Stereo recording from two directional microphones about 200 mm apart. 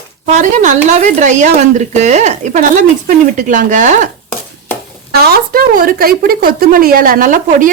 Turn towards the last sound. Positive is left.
turn(degrees=-40)  # may be behind; listen again after turning